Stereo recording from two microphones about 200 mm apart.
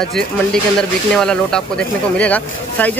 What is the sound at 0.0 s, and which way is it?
Speech, centre (ahead or behind).